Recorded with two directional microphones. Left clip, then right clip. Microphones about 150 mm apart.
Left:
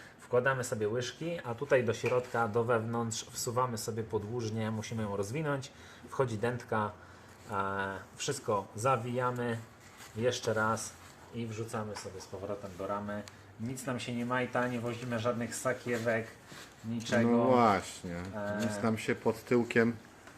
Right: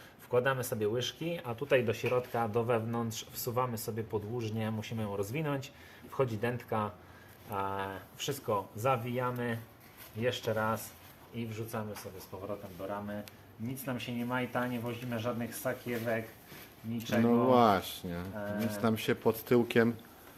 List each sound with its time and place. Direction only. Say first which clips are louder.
0.3 s speech: left 1 dB; 20° right (ahead or behind); by 11.9 s centre (ahead or behind)
12.3 s speech: left 2 dB; 15° left (ahead or behind)
12.8 s speech: left 4 dB; 30° left (ahead or behind)
17.2 s speech: right 1 dB; 15° right (ahead or behind)
18.3 s speech: left 2 dB; 20° left (ahead or behind)
19.0 s speech: right 2 dB; 20° right (ahead or behind)